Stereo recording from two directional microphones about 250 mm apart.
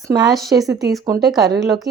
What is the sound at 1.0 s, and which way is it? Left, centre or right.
Speech, centre.